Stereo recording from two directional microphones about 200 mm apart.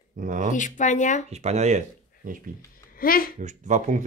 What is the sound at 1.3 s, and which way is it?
Speech, 35° right (ahead or behind).